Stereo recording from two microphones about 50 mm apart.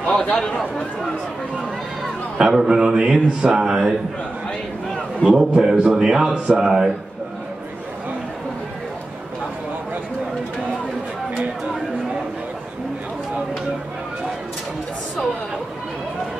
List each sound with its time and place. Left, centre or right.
2.3 s a man's voice: centre
2.8 s a sound: centre
3.6 s a man's voice: centre
5.2 s a man's voice: centre